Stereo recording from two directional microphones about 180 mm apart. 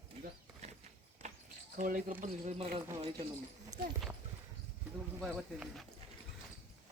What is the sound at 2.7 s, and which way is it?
Speech, 25° right (ahead or behind).